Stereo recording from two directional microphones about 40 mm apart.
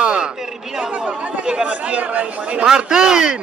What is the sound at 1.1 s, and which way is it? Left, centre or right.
Chatter, right.